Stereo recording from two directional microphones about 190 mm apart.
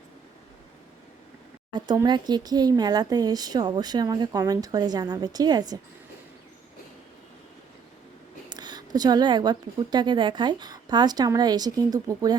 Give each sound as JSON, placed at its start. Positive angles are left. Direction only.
{"t": 1.7, "sound": "speech", "side_deg": -25}
{"t": 8.4, "sound": "speech", "side_deg": -20}